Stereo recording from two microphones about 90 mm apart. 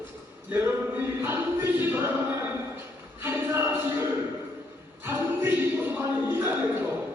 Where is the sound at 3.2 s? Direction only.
25° right (ahead or behind).